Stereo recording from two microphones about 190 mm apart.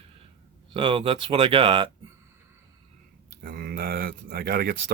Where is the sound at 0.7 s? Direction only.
25° right (ahead or behind).